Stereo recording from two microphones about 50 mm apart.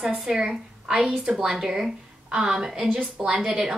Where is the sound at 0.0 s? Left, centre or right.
Centre.